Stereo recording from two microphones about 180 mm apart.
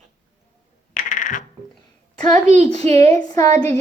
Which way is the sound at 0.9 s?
45° left (ahead or behind).